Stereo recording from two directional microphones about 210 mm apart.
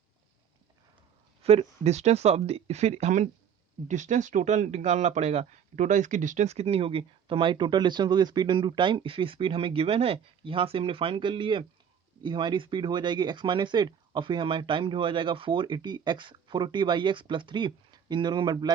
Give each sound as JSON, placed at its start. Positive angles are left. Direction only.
{"t": 1.4, "sound": "speech", "side_deg": -30}